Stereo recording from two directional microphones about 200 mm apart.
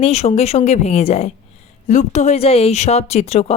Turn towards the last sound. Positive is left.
turn(degrees=30)  # may be behind; listen again after turning